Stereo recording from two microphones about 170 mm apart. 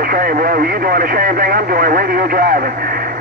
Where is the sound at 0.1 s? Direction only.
55° right (ahead or behind).